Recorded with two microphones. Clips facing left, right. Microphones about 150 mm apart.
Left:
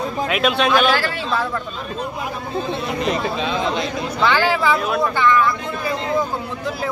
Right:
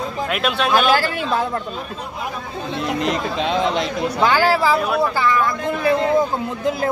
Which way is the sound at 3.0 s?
70° right (ahead or behind).